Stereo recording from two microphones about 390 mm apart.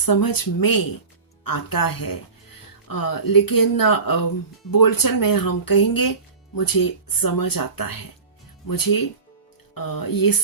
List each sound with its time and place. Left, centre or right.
0.0 s speech: left